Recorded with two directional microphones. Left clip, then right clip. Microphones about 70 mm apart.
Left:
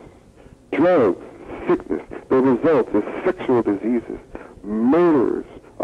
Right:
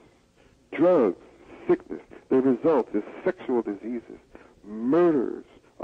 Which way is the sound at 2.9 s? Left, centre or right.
Left.